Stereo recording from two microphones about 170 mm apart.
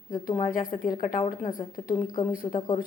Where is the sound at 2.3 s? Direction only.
55° left (ahead or behind).